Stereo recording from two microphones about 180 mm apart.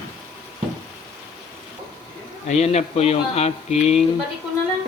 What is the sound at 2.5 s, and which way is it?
Speech, 40° left (ahead or behind).